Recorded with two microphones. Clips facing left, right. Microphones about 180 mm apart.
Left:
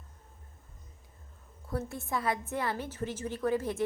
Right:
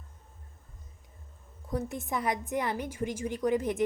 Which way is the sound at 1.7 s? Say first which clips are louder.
Right 2 dB; 15° right (ahead or behind).